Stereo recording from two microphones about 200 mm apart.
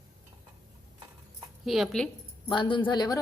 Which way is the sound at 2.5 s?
25° left (ahead or behind).